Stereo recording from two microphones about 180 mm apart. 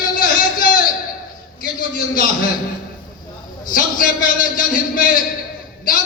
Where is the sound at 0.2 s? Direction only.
50° left (ahead or behind).